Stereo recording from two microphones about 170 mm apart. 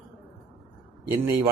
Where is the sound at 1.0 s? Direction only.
15° right (ahead or behind).